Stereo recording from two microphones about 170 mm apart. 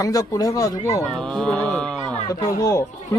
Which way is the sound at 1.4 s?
5° left (ahead or behind).